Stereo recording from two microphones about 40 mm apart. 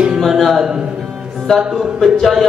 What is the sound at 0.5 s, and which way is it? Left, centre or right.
Speech, centre.